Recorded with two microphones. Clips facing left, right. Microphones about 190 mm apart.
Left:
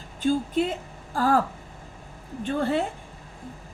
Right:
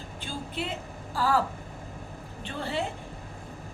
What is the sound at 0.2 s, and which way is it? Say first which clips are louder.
A woman's voice: left 12 dB; 45° left (ahead or behind).